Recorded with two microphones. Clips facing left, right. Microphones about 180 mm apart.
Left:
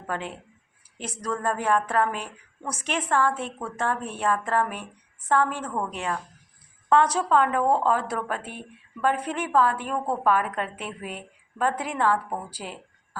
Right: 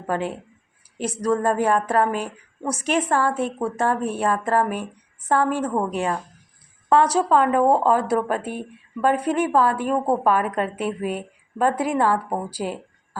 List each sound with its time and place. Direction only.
0.1 s a woman's voice: 40° right (ahead or behind)